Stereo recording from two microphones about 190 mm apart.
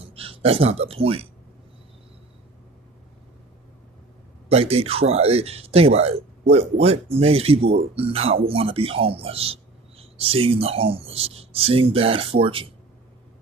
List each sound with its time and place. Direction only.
0.1 s speech: 30° right (ahead or behind)
4.5 s speech: 30° right (ahead or behind)